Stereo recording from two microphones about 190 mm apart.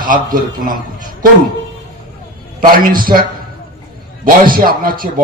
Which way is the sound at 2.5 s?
50° right (ahead or behind).